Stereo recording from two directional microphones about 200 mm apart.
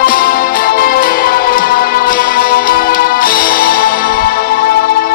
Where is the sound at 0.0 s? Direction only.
45° left (ahead or behind).